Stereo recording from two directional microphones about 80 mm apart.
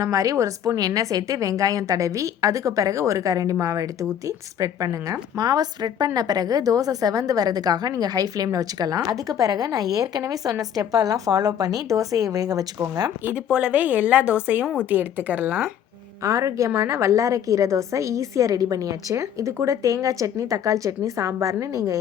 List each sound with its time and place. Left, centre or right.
0.0 s a woman's voice: right
5.4 s a woman's voice: right
13.3 s speech: centre
16.2 s a woman's voice: right